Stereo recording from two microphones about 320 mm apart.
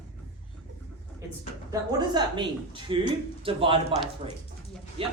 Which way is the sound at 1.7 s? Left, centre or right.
Centre.